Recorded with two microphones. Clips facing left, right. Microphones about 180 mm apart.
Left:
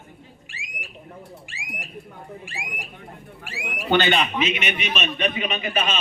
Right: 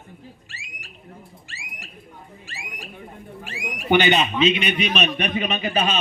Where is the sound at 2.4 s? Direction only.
15° left (ahead or behind).